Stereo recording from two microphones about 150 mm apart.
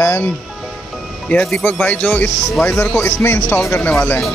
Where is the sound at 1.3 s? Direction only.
5° left (ahead or behind).